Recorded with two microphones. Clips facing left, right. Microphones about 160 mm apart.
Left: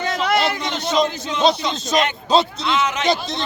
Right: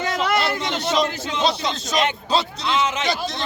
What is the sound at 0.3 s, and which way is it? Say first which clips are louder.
A man's voice: left 2 dB; 15° left (ahead or behind).